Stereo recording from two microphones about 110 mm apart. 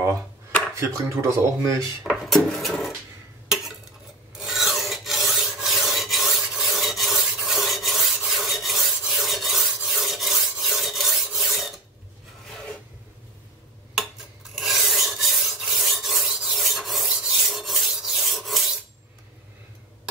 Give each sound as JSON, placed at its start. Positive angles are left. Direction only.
{"t": 0.7, "sound": "speech", "side_deg": -25}
{"t": 2.0, "sound": "dishes", "side_deg": 0}
{"t": 3.4, "sound": "a sound", "side_deg": 0}
{"t": 4.4, "sound": "filing", "side_deg": -5}
{"t": 13.9, "sound": "filing", "side_deg": -5}